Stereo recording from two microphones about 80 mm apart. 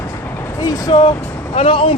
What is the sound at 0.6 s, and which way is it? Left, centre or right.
Speech, left.